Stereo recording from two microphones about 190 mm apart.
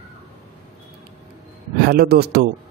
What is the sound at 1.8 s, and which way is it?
Speech, 55° right (ahead or behind).